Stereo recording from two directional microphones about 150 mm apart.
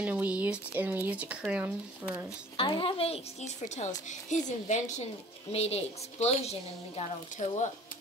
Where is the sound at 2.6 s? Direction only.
35° left (ahead or behind).